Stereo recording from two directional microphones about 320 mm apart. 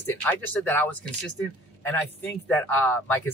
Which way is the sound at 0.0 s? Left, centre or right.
Centre.